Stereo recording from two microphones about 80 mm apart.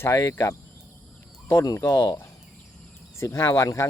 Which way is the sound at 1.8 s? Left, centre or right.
Left.